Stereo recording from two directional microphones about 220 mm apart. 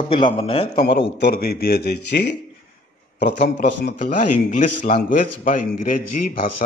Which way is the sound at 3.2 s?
50° left (ahead or behind).